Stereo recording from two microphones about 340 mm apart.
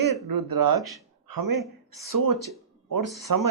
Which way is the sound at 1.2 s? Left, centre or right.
Right.